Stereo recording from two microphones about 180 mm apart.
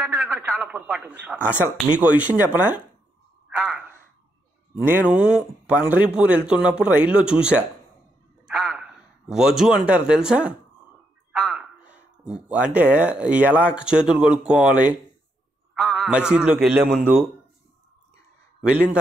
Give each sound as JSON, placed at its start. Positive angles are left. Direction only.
{"t": 0.0, "sound": "a sound", "side_deg": -10}
{"t": 0.5, "sound": "speech", "side_deg": -10}
{"t": 3.4, "sound": "a sound", "side_deg": -10}
{"t": 4.8, "sound": "a man's voice", "side_deg": -10}
{"t": 15.7, "sound": "music", "side_deg": 0}
{"t": 17.0, "sound": "speech", "side_deg": -10}